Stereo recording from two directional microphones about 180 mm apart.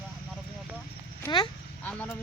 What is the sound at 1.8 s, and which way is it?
Speech, 10° left (ahead or behind).